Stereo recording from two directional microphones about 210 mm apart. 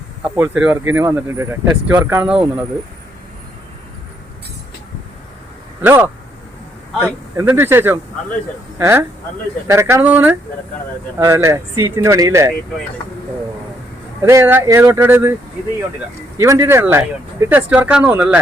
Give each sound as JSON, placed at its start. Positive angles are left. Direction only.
{"t": 0.3, "sound": "speech", "side_deg": -5}
{"t": 5.8, "sound": "speech", "side_deg": -10}
{"t": 14.2, "sound": "speech", "side_deg": -15}
{"t": 16.4, "sound": "speech", "side_deg": -15}